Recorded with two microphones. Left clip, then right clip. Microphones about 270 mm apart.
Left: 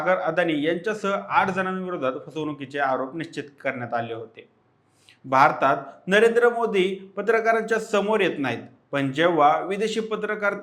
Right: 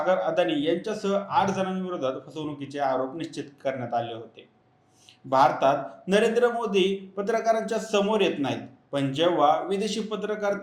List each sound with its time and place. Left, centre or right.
0.1 s a man's voice: left
5.3 s a man's voice: left